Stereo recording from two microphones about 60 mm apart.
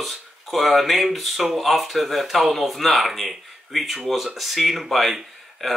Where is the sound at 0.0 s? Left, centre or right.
Centre.